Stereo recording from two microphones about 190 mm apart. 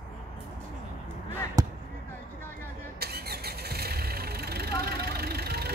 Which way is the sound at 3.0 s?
55° right (ahead or behind).